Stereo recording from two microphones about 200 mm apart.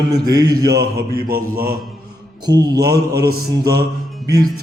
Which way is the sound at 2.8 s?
50° right (ahead or behind).